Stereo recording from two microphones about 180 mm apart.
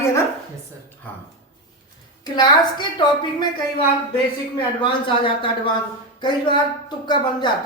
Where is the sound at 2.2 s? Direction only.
25° left (ahead or behind).